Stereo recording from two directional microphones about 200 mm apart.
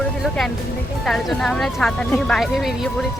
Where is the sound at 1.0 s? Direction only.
Centre (ahead or behind).